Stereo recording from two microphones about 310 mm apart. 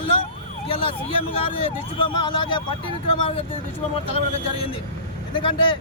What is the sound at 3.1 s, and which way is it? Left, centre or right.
Speech, centre.